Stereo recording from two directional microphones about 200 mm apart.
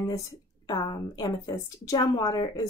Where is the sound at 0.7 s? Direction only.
20° left (ahead or behind).